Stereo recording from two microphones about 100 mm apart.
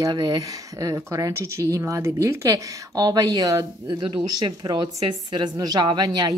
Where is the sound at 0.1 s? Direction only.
45° right (ahead or behind).